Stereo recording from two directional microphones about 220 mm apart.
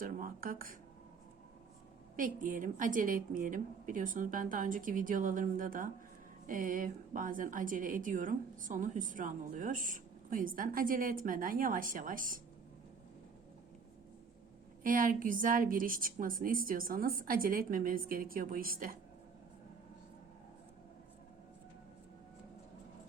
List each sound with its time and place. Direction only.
0.0 s a woman's voice: 40° right (ahead or behind)
2.1 s a woman's voice: 40° right (ahead or behind)
14.8 s a woman's voice: 40° right (ahead or behind)